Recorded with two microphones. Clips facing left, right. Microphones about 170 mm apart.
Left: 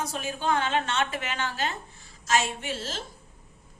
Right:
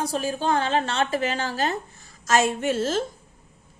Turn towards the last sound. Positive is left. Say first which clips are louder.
# right 11 dB
turn(degrees=-50)  # may be behind; listen again after turning